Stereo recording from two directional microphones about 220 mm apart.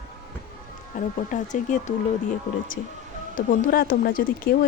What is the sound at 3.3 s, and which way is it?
Speech, 40° left (ahead or behind).